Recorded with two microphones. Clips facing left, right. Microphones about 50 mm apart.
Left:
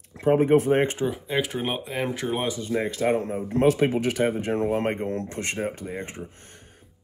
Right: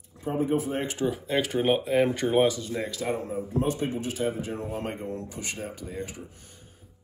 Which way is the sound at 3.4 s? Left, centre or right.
Left.